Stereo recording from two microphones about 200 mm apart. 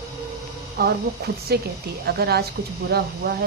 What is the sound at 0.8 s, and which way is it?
Speech, 55° right (ahead or behind).